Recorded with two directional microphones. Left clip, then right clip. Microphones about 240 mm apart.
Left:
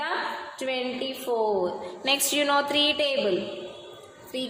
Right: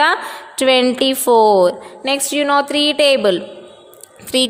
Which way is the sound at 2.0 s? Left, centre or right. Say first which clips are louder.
Right 7 dB; right.